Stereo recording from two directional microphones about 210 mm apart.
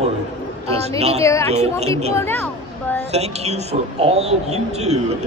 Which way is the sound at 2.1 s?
10° left (ahead or behind).